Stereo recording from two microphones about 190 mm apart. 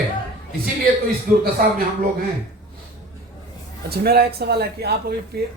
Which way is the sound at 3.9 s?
55° right (ahead or behind).